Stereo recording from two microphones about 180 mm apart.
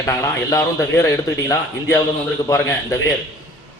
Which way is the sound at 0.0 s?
20° left (ahead or behind).